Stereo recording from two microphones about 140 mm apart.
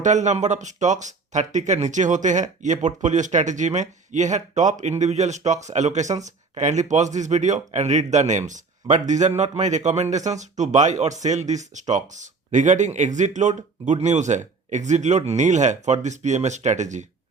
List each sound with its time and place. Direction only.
0.0 s speech: 60° right (ahead or behind)